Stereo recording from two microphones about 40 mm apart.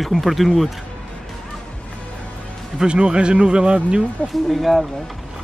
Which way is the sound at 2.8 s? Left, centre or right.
Right.